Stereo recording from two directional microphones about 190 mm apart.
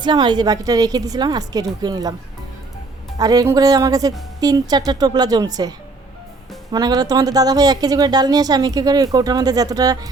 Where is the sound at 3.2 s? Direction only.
20° right (ahead or behind).